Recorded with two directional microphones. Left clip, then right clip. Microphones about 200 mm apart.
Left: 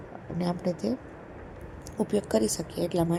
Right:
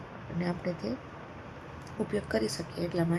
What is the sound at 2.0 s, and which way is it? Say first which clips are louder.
A woman's voice: left 5 dB; 15° left (ahead or behind).